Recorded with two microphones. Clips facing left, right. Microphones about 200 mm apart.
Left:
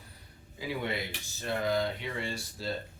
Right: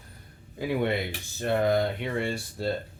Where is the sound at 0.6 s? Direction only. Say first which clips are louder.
Right 7 dB; 55° right (ahead or behind).